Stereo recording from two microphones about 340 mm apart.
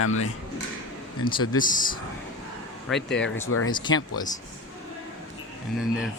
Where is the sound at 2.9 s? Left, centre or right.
Left.